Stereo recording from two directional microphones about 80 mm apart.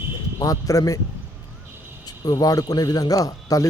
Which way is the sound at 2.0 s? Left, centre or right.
Left.